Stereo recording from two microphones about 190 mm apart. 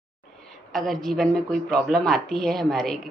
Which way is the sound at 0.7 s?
Centre (ahead or behind).